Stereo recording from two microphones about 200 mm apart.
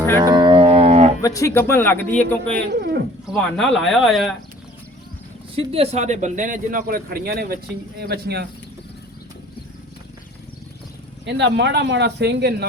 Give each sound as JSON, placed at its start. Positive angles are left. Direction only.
{"t": 0.2, "sound": "music", "side_deg": -20}
{"t": 1.2, "sound": "speech", "side_deg": 15}
{"t": 2.7, "sound": "speech", "side_deg": -55}
{"t": 3.2, "sound": "speech", "side_deg": 0}
{"t": 5.5, "sound": "a man's voice", "side_deg": -30}
{"t": 11.3, "sound": "speech", "side_deg": -60}